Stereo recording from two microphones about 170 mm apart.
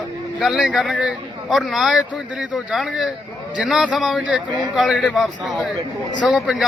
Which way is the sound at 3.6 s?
5° right (ahead or behind).